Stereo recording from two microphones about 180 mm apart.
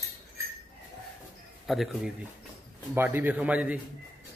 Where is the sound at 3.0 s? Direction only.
10° right (ahead or behind).